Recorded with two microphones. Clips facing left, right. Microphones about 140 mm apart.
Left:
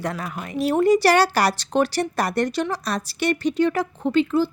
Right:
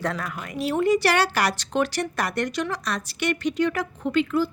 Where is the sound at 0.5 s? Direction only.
40° left (ahead or behind).